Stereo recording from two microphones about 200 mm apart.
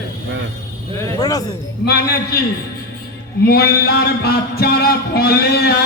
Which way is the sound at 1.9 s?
55° left (ahead or behind).